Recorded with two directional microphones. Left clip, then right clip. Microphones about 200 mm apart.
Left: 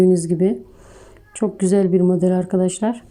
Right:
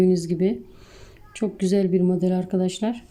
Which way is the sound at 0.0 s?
5° left (ahead or behind).